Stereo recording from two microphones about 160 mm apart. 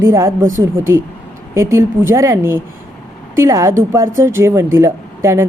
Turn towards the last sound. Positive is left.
turn(degrees=-15)  # may be behind; listen again after turning